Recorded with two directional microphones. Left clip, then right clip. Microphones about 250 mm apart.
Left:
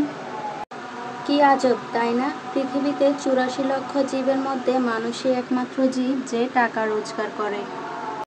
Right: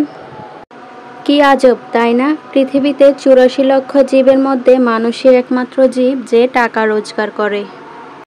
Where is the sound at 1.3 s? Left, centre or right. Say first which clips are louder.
Right 9 dB; right.